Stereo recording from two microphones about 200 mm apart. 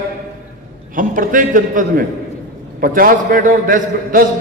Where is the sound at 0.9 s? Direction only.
40° right (ahead or behind).